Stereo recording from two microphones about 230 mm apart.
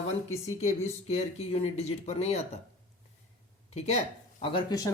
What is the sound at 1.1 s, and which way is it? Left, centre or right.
Speech, left.